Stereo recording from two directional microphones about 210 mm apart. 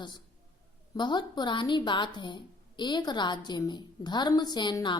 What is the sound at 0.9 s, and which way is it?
A woman's voice, 20° left (ahead or behind).